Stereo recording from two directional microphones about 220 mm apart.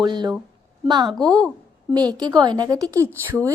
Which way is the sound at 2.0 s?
20° right (ahead or behind).